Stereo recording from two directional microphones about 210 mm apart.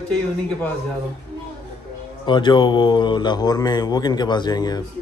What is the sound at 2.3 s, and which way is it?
Speech, 20° left (ahead or behind).